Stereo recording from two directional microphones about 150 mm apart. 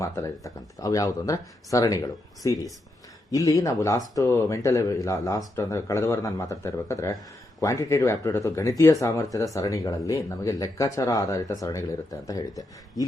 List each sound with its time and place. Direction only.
0.0 s speech: 20° left (ahead or behind)